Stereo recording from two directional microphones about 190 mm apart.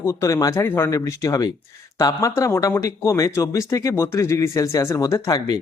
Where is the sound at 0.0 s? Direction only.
15° left (ahead or behind).